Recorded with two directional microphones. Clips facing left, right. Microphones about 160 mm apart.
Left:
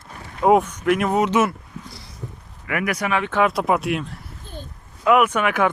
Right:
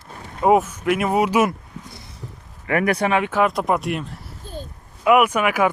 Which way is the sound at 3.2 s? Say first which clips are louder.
Even; 5° right (ahead or behind).